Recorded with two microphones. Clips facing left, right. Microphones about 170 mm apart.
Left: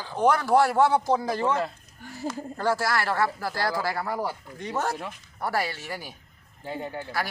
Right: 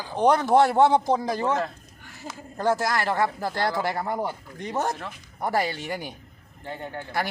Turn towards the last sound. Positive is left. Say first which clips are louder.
# left 1 dB
turn(degrees=5)  # may be behind; listen again after turning